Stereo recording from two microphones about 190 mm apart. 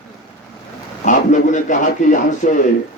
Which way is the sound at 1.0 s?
40° left (ahead or behind).